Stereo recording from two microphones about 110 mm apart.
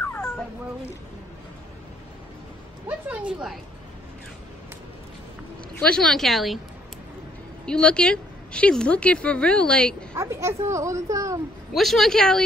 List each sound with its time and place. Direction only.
0.1 s cat: 5° left (ahead or behind)
2.9 s a woman's voice: 15° right (ahead or behind)
5.8 s a woman's voice: 5° left (ahead or behind)
7.6 s a woman's voice: 10° left (ahead or behind)
10.1 s speech: 25° right (ahead or behind)
11.7 s a woman's voice: centre (ahead or behind)